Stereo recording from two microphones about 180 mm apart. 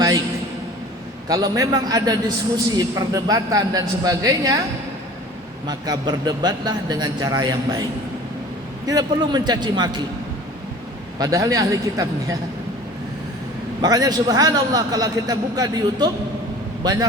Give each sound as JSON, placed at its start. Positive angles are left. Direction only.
{"t": 1.3, "sound": "a man's voice", "side_deg": -20}
{"t": 5.6, "sound": "a man's voice", "side_deg": -20}
{"t": 8.9, "sound": "a man's voice", "side_deg": -20}
{"t": 11.2, "sound": "a man's voice", "side_deg": -20}
{"t": 13.8, "sound": "a man's voice", "side_deg": -20}